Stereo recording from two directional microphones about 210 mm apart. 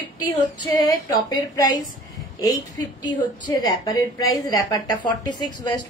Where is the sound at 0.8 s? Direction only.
15° left (ahead or behind).